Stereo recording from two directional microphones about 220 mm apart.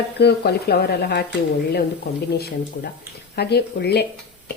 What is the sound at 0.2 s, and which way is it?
A woman's voice, 50° left (ahead or behind).